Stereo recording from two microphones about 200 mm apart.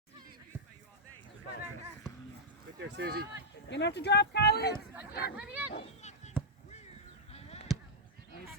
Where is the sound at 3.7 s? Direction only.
60° left (ahead or behind).